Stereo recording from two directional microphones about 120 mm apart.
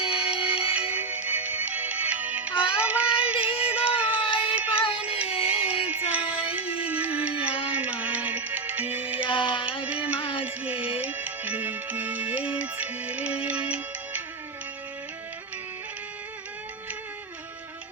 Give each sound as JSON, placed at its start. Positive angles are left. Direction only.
{"t": 0.1, "sound": "music", "side_deg": -10}
{"t": 2.8, "sound": "child singing", "side_deg": -10}
{"t": 3.6, "sound": "music", "side_deg": -10}
{"t": 5.3, "sound": "music", "side_deg": 55}
{"t": 5.8, "sound": "music", "side_deg": -10}
{"t": 9.2, "sound": "music", "side_deg": 45}
{"t": 9.8, "sound": "music", "side_deg": -10}